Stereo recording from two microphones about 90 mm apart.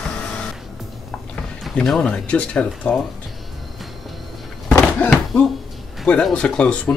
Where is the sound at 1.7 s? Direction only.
10° left (ahead or behind).